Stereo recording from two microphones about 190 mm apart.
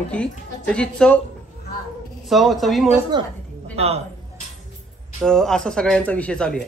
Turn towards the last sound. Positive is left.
turn(degrees=5)  # may be behind; listen again after turning